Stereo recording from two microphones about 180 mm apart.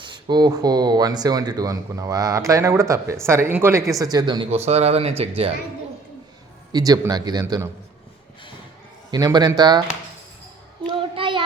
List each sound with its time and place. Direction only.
0.0 s speech: 25° right (ahead or behind)
6.7 s speech: 20° right (ahead or behind)
9.0 s speech: 20° right (ahead or behind)
10.8 s child singing: 30° right (ahead or behind)